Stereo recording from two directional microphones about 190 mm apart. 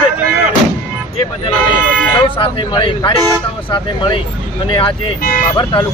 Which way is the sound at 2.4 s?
30° left (ahead or behind).